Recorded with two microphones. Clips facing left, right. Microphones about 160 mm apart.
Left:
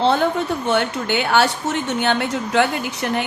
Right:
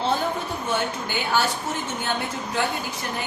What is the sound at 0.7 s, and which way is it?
Speech, 75° left (ahead or behind).